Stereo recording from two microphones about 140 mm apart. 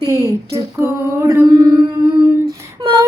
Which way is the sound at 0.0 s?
25° right (ahead or behind).